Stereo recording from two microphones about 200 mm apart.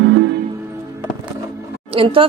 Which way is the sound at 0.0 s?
70° right (ahead or behind).